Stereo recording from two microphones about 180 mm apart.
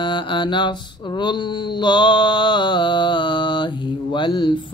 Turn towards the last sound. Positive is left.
turn(degrees=25)  # may be behind; listen again after turning